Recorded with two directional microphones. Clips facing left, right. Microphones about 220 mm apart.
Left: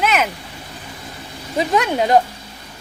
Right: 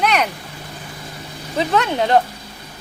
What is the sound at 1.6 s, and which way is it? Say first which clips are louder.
Speech: left 1 dB; 10° left (ahead or behind).